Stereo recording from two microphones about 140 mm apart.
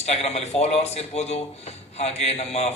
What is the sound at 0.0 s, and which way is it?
Speech, 50° left (ahead or behind).